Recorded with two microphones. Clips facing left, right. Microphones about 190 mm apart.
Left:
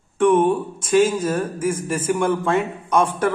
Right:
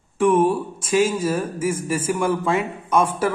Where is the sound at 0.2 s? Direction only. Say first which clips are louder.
Left 1 dB; 5° right (ahead or behind).